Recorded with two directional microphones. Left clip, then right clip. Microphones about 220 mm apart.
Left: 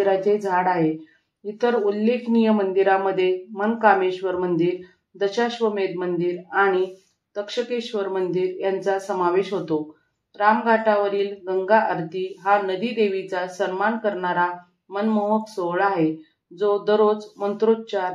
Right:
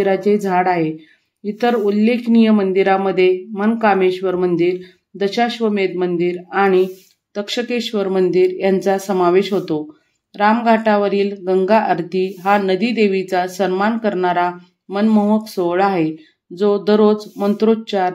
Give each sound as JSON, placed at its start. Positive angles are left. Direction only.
{"t": 0.0, "sound": "speech", "side_deg": -25}